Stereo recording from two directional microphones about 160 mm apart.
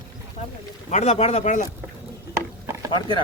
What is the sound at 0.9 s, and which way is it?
Speech, 45° left (ahead or behind).